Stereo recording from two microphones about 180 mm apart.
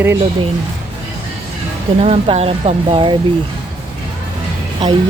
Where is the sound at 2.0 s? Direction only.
35° right (ahead or behind).